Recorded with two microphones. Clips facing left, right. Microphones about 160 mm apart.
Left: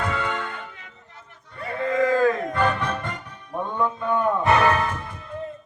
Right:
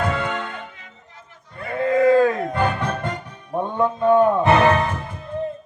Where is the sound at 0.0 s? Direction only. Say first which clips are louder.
Right 3 dB; 20° right (ahead or behind).